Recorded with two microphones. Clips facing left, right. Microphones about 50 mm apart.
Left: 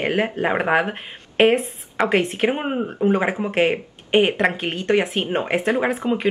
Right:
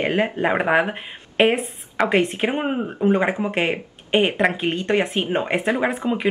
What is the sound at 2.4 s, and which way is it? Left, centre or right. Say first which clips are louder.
Speech: left 1 dB; centre.